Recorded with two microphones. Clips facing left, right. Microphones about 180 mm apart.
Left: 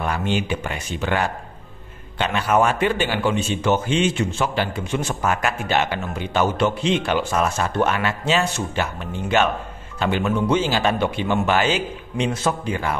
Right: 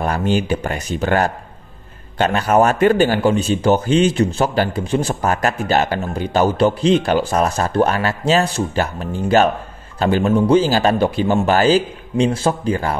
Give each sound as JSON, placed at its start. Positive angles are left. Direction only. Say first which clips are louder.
{"t": 0.0, "sound": "a man's voice", "louder": "right 5 dB", "side_deg": -40}